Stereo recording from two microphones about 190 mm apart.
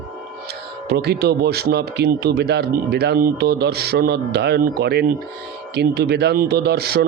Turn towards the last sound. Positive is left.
turn(degrees=-55)  # may be behind; listen again after turning